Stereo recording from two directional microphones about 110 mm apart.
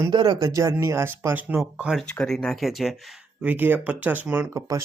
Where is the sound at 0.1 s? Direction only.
40° right (ahead or behind); by 1.9 s 15° right (ahead or behind).